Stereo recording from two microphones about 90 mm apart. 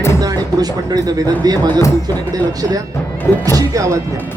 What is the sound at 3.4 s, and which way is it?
Speech, 40° right (ahead or behind).